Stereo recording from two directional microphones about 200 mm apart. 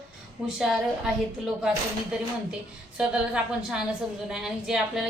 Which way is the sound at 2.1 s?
5° right (ahead or behind).